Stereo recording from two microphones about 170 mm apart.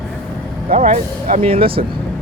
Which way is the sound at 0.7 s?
45° right (ahead or behind).